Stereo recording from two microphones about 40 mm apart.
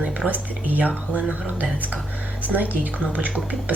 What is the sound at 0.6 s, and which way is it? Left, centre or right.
Speech, right.